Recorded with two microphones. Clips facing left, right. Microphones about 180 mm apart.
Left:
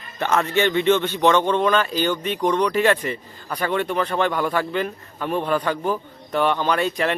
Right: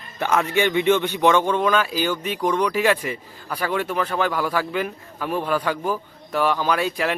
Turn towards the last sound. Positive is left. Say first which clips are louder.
# left 1 dB
turn(degrees=-5)  # may be behind; listen again after turning